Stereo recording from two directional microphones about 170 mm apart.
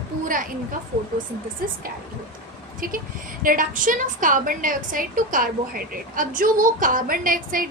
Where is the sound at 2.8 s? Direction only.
55° right (ahead or behind).